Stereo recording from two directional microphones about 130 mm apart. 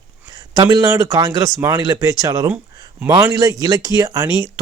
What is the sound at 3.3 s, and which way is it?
Speech, 30° right (ahead or behind).